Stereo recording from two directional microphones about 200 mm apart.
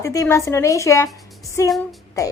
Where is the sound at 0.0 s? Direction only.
15° left (ahead or behind).